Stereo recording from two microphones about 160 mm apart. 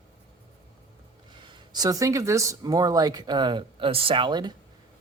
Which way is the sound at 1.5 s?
25° right (ahead or behind).